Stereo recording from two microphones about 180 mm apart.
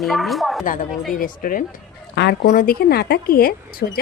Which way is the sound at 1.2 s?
50° left (ahead or behind).